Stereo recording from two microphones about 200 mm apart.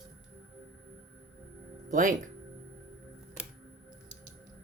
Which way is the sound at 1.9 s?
40° right (ahead or behind).